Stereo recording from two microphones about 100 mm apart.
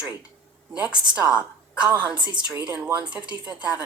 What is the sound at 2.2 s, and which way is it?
Speech, 50° right (ahead or behind).